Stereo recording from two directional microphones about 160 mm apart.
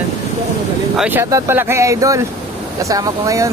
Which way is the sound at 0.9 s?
10° right (ahead or behind).